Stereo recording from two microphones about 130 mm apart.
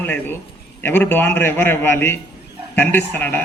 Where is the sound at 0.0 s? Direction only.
15° left (ahead or behind).